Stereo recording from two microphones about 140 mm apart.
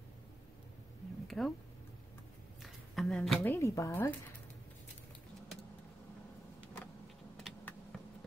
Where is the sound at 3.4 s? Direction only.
20° left (ahead or behind).